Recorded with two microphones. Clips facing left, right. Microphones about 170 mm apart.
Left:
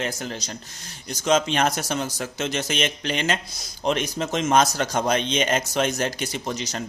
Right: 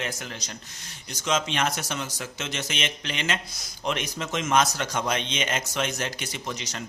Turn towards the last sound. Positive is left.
turn(degrees=35)  # may be behind; listen again after turning